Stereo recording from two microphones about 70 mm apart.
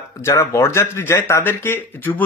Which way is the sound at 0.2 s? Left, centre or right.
Left.